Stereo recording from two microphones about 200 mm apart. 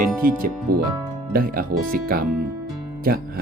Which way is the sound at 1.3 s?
45° right (ahead or behind).